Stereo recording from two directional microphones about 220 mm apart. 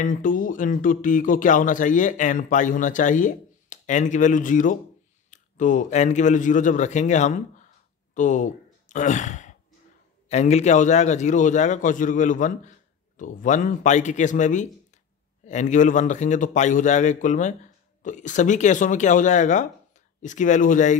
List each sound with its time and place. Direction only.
0.0 s speech: 35° left (ahead or behind)